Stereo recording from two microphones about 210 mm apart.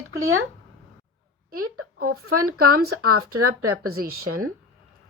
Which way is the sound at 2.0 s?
90° right.